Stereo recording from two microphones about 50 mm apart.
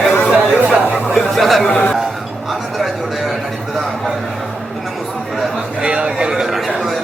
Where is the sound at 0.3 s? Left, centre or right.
Centre.